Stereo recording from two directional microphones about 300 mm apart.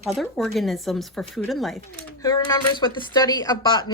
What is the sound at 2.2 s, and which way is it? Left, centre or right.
A woman's voice, centre.